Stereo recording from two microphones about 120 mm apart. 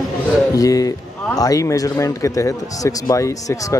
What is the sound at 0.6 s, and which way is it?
Speech, 30° left (ahead or behind).